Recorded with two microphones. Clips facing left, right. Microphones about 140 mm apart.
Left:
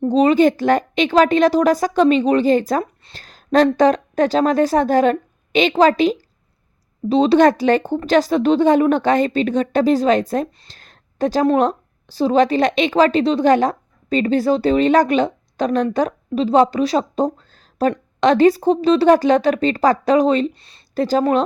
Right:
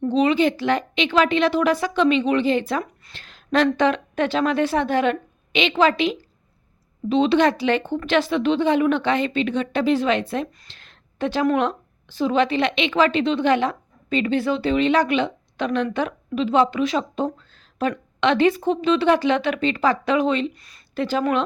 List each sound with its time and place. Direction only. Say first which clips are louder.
0.0 s speech: left 5 dB; 40° left (ahead or behind)